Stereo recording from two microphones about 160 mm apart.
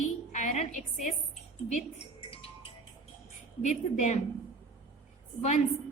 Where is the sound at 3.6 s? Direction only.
45° left (ahead or behind).